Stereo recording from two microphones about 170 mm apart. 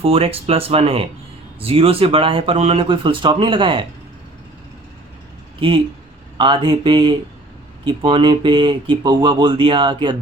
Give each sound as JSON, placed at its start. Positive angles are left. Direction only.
{"t": 0.0, "sound": "speech", "side_deg": -35}
{"t": 5.5, "sound": "speech", "side_deg": -30}